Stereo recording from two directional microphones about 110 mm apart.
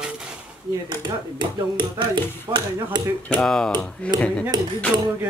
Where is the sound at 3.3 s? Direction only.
5° left (ahead or behind).